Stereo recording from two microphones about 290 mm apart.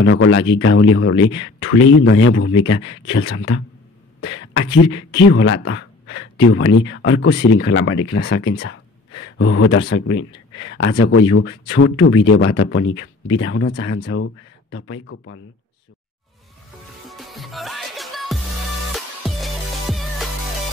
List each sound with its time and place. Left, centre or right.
0.0 s speech: left
4.2 s a sound: left
4.8 s a man's voice: left
17.1 s music: centre